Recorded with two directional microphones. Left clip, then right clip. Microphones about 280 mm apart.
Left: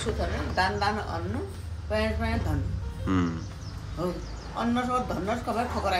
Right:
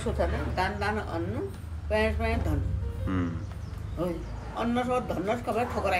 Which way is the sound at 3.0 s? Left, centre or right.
Centre.